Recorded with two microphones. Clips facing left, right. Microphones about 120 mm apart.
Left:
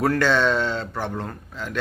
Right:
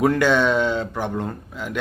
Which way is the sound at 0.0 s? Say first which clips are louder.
Right 2 dB; 15° right (ahead or behind).